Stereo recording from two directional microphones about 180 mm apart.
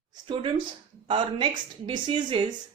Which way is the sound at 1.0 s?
25° right (ahead or behind).